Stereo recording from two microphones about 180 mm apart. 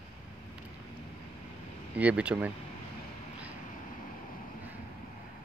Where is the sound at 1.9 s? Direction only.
10° right (ahead or behind).